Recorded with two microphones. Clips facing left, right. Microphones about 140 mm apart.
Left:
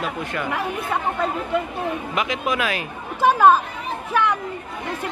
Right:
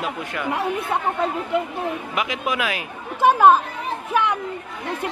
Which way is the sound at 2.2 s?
10° right (ahead or behind).